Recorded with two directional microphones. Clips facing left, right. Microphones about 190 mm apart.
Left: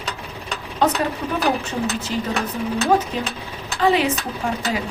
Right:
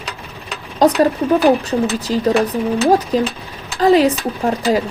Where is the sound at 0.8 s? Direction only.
35° right (ahead or behind).